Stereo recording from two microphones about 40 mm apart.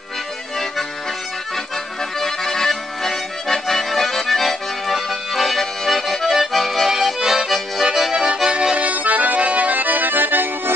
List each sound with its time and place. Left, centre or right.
2.1 s accordion: centre
7.2 s accordion: centre
8.1 s accordion: centre; by 10.7 s right